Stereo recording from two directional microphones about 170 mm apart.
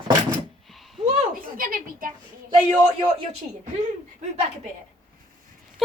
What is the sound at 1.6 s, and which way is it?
Speech, 55° right (ahead or behind).